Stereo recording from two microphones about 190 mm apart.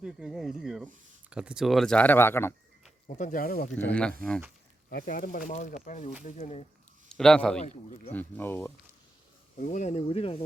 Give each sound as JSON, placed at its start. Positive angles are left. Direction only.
{"t": 0.0, "sound": "speech", "side_deg": -5}
{"t": 3.1, "sound": "speech", "side_deg": 40}
{"t": 3.8, "sound": "speech", "side_deg": 5}
{"t": 4.9, "sound": "speech", "side_deg": 50}
{"t": 7.1, "sound": "a man's voice", "side_deg": 5}
{"t": 7.6, "sound": "speech", "side_deg": 40}
{"t": 8.1, "sound": "speech", "side_deg": 10}
{"t": 9.6, "sound": "speech", "side_deg": 40}